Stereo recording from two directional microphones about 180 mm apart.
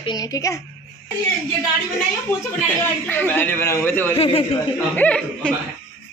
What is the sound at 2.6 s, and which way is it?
A man's voice, 10° left (ahead or behind).